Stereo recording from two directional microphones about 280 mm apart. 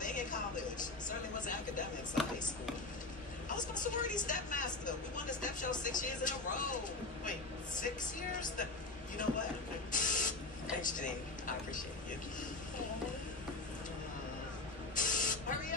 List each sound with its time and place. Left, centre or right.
0.0 s a sound: left
3.4 s vehicle: left
7.8 s speech: left
9.1 s printer: left
15.0 s spray: left